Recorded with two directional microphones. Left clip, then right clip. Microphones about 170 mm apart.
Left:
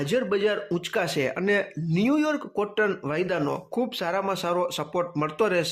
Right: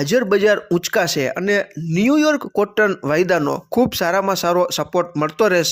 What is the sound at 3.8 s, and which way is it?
Speech, 40° right (ahead or behind).